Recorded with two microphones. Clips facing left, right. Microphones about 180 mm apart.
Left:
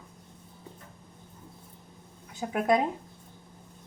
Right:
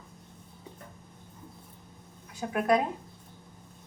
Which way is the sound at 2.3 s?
20° left (ahead or behind).